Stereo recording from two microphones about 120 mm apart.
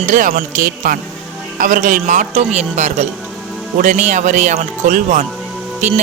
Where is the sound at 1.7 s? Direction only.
90° right; by 3.1 s 75° right (ahead or behind).